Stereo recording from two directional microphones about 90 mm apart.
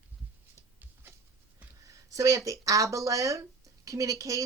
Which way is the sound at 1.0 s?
25° right (ahead or behind).